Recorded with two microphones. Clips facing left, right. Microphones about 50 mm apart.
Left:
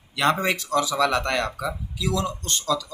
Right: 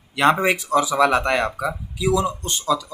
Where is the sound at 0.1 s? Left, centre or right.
Centre.